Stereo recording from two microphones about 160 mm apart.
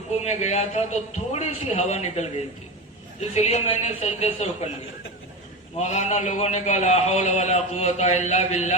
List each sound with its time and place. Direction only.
0.2 s a man's voice: 40° left (ahead or behind)
5.7 s a man's voice: 45° left (ahead or behind)